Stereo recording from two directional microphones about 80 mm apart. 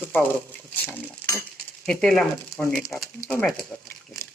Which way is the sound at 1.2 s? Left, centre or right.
Left.